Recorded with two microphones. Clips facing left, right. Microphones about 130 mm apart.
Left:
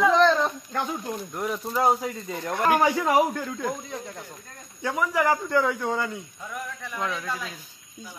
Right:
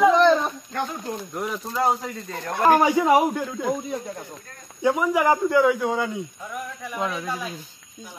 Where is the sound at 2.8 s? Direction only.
15° right (ahead or behind).